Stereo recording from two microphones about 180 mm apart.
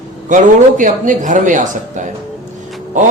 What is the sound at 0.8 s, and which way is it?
A man's voice, 45° right (ahead or behind).